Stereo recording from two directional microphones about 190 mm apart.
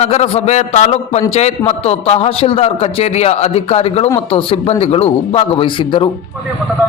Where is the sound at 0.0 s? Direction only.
35° left (ahead or behind).